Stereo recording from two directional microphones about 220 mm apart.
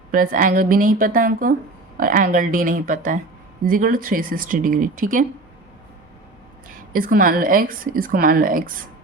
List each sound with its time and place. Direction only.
0.1 s a woman's voice: 40° right (ahead or behind)
6.9 s a woman's voice: 40° right (ahead or behind)